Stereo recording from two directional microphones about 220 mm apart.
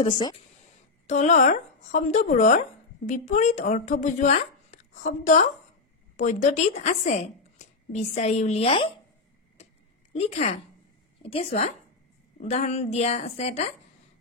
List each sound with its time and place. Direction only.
0.0 s speech: 20° left (ahead or behind)
1.0 s a woman's voice: 35° left (ahead or behind)
10.1 s speech: 30° left (ahead or behind)